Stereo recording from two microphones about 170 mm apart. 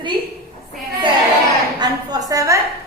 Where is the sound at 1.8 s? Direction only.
20° right (ahead or behind).